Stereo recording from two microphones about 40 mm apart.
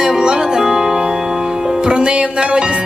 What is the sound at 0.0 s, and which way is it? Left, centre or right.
Music, centre.